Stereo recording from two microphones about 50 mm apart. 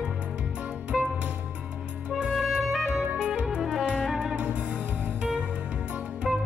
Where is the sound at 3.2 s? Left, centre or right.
Centre.